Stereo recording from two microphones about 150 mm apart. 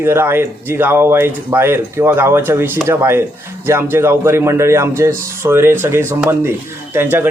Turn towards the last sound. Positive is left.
turn(degrees=-15)  # may be behind; listen again after turning